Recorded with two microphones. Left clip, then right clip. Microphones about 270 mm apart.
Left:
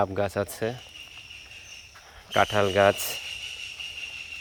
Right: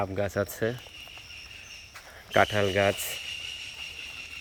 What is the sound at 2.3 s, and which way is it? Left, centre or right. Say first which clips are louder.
Speech: left 1 dB; centre.